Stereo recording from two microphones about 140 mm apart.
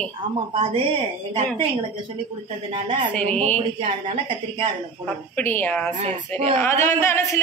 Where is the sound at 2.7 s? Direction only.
35° right (ahead or behind).